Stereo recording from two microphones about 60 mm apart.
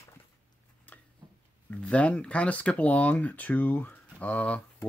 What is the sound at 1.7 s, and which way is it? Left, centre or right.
Speech, left.